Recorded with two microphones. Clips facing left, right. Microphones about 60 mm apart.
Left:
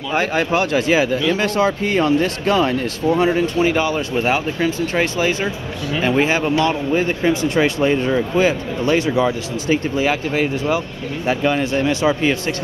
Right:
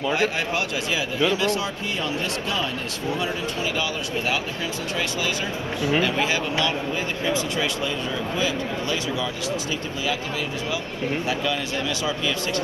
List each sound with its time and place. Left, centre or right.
0.1 s speech: left